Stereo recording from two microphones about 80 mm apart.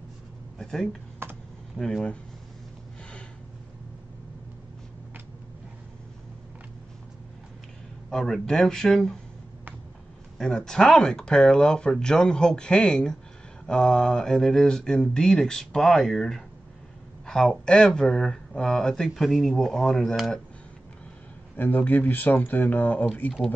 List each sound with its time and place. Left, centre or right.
0.6 s speech: centre
1.2 s computer keyboard: right
1.8 s speech: centre
8.1 s speech: centre
10.3 s speech: centre
21.5 s speech: left